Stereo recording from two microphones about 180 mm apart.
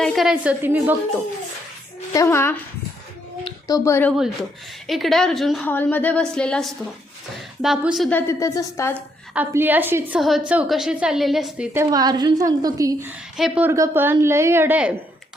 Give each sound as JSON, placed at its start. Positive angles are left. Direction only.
{"t": 0.0, "sound": "a woman's voice", "side_deg": 0}
{"t": 2.1, "sound": "a woman's voice", "side_deg": 15}
{"t": 4.9, "sound": "a woman's voice", "side_deg": 0}
{"t": 8.1, "sound": "a woman's voice", "side_deg": 15}
{"t": 9.3, "sound": "a woman's voice", "side_deg": -10}
{"t": 13.3, "sound": "a woman's voice", "side_deg": 0}
{"t": 13.7, "sound": "a woman's voice", "side_deg": -15}